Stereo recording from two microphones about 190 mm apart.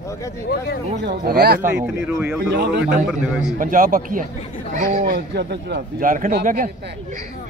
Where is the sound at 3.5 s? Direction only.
45° right (ahead or behind).